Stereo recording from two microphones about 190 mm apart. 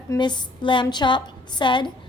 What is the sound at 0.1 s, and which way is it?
A woman's voice, 25° left (ahead or behind).